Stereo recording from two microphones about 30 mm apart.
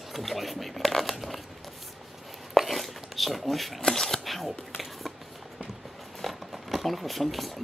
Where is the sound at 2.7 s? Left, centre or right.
Centre.